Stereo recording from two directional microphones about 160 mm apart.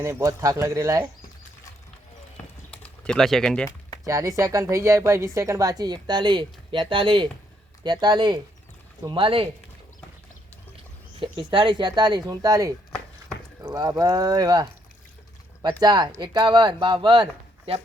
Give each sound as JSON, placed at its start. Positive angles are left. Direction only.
{"t": 0.0, "sound": "speech", "side_deg": -20}
{"t": 2.6, "sound": "typing", "side_deg": 5}
{"t": 4.0, "sound": "speech", "side_deg": -20}
{"t": 11.2, "sound": "speech", "side_deg": -30}
{"t": 15.8, "sound": "speech", "side_deg": -25}